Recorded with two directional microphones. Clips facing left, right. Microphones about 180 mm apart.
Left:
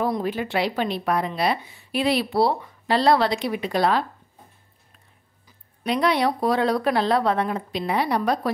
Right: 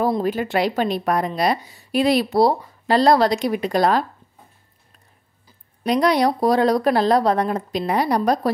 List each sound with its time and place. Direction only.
0.0 s a woman's voice: 40° right (ahead or behind)
5.9 s speech: 40° right (ahead or behind)